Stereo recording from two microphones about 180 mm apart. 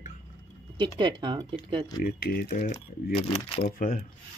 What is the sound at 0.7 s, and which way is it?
Speech, 25° right (ahead or behind).